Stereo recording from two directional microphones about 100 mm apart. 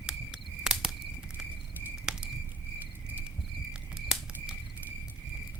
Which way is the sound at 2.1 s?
5° right (ahead or behind).